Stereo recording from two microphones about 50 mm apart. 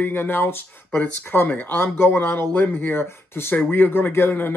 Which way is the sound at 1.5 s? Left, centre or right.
Left.